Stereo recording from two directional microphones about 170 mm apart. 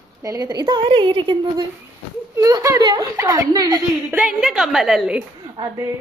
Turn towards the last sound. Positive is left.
turn(degrees=-20)  # may be behind; listen again after turning